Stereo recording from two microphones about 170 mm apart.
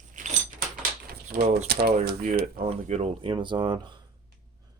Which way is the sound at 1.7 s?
70° right (ahead or behind).